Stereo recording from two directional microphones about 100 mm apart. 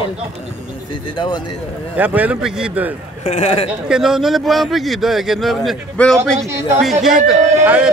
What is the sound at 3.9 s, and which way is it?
A man's voice, 5° right (ahead or behind).